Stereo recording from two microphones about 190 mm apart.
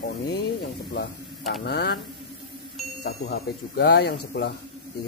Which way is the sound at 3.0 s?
60° left (ahead or behind).